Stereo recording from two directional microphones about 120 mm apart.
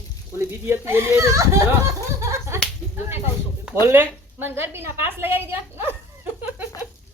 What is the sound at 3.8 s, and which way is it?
A woman's voice, 20° right (ahead or behind).